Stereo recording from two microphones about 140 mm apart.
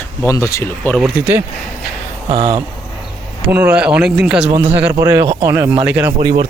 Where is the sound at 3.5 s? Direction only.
10° right (ahead or behind).